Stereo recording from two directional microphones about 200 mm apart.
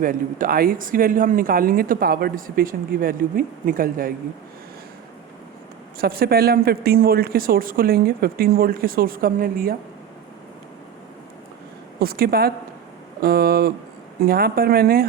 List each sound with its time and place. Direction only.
0.0 s speech: 45° right (ahead or behind)
6.0 s speech: 50° right (ahead or behind)
11.9 s speech: 50° right (ahead or behind)